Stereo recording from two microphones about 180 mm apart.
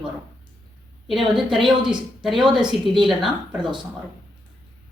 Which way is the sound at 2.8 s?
Centre (ahead or behind).